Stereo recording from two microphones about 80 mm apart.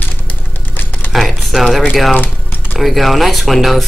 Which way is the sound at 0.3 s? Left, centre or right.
Left.